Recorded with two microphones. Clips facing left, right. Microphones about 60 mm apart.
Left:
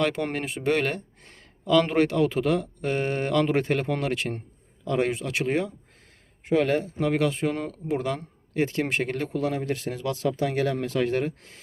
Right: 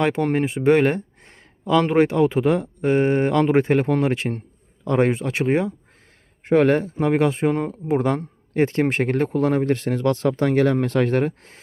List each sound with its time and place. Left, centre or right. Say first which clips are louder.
0.0 s speech: right 6 dB; right
6.4 s speech: right 6 dB; right
7.9 s speech: right 7 dB; right